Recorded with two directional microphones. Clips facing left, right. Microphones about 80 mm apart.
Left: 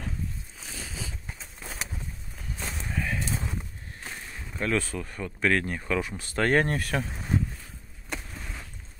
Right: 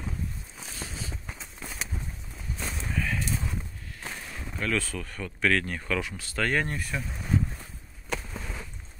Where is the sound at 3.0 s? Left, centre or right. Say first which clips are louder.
Even; left.